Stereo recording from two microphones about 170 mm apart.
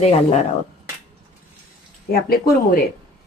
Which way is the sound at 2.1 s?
65° left (ahead or behind).